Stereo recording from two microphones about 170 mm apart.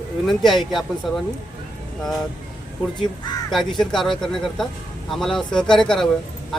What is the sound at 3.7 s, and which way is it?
Speech, centre (ahead or behind).